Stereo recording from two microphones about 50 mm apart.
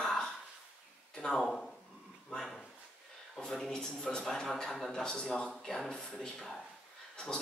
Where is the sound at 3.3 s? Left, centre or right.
Centre.